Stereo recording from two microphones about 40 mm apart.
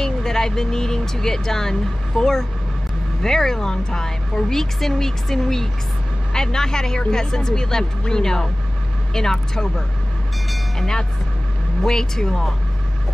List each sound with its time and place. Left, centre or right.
0.0 s speech: centre
11.8 s speech: centre